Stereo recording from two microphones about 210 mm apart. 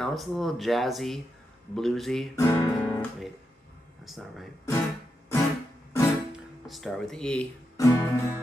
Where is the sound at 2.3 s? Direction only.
15° left (ahead or behind).